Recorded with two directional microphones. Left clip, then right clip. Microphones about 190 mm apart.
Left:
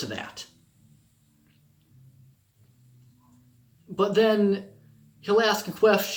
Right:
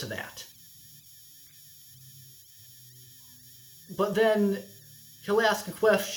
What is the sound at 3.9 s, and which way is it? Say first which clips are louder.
Speech: left 3 dB; 20° left (ahead or behind).